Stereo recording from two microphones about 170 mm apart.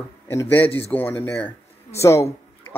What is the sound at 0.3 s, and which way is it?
A man's voice, 10° left (ahead or behind).